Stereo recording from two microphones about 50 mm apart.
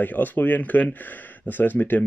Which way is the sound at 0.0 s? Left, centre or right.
Left.